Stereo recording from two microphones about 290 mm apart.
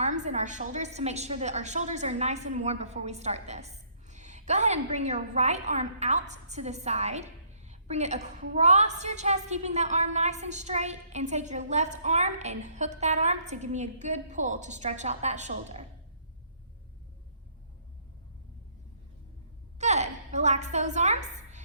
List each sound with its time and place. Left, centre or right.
0.0 s a woman's voice: right
19.8 s a woman's voice: right